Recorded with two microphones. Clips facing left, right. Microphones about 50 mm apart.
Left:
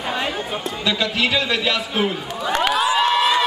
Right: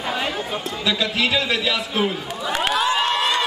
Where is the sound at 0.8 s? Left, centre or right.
Centre.